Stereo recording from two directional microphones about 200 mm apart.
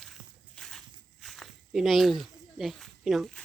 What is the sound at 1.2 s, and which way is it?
Snake, centre (ahead or behind).